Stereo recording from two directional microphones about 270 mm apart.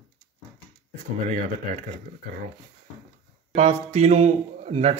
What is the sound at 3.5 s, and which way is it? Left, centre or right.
Speech, right.